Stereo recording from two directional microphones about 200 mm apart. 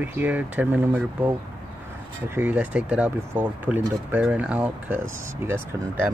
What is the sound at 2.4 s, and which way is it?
Speech, 5° right (ahead or behind).